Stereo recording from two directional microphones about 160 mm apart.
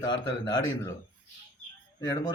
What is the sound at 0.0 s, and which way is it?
Speech, 30° left (ahead or behind).